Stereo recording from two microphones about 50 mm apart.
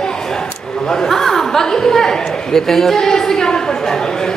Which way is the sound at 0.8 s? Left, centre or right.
Centre.